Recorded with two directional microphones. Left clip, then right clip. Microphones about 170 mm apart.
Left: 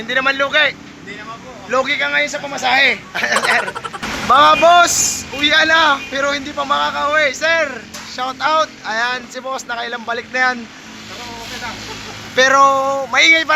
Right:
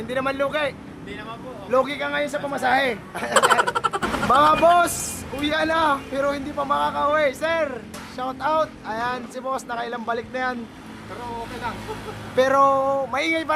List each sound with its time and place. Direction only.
0.1 s speech: 10° right (ahead or behind)
1.7 s speech: 15° right (ahead or behind); by 2.9 s 30° right (ahead or behind)
2.9 s speech: 15° right (ahead or behind)
3.3 s speech: centre (ahead or behind)
12.4 s speech: 10° right (ahead or behind)